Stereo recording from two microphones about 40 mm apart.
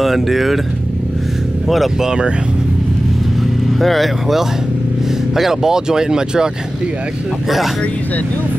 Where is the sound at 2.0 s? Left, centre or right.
Centre.